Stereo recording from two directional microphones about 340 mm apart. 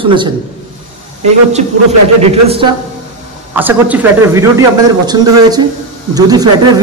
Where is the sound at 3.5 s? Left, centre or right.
Centre.